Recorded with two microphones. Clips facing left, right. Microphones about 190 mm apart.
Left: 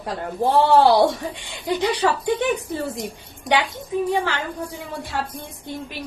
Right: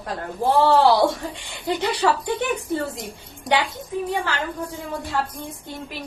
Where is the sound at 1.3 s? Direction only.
15° left (ahead or behind).